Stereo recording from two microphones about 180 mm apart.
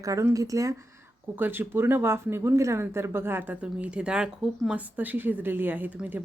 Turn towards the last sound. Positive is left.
turn(degrees=-10)  # may be behind; listen again after turning